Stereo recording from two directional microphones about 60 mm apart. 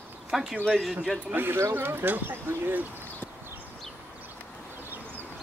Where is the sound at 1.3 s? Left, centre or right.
Right.